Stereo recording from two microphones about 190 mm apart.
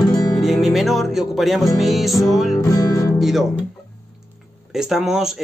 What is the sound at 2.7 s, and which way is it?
Music, 20° left (ahead or behind).